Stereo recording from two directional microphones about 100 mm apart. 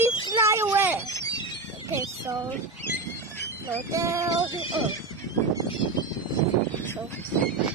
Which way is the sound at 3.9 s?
30° right (ahead or behind).